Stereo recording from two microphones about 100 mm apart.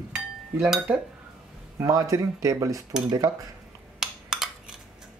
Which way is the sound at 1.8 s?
35° right (ahead or behind).